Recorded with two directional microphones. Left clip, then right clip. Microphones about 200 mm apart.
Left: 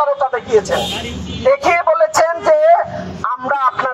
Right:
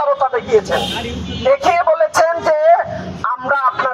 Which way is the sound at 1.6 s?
10° left (ahead or behind).